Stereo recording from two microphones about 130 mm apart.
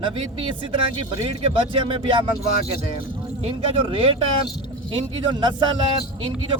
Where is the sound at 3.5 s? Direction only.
45° right (ahead or behind).